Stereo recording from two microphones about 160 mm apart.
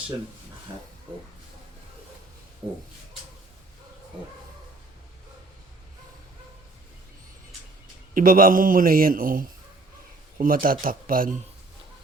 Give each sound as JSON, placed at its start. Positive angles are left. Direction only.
{"t": 8.1, "sound": "a man's voice", "side_deg": -60}